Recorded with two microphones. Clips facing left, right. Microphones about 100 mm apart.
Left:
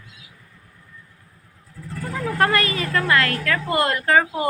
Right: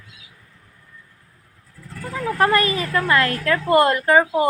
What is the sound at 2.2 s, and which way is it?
A woman's voice, 20° right (ahead or behind).